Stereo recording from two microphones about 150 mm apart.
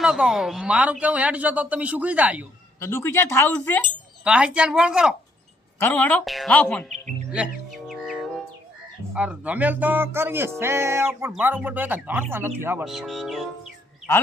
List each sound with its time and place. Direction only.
0.0 s speech: 5° right (ahead or behind)
2.8 s speech: 15° left (ahead or behind)
4.2 s speech: 5° right (ahead or behind)
5.8 s speech: 10° left (ahead or behind)
7.3 s music: 5° right (ahead or behind)
9.1 s speech: 10° right (ahead or behind)
12.8 s speech: centre (ahead or behind)